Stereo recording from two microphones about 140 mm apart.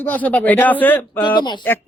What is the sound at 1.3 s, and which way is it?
Speech, 30° left (ahead or behind).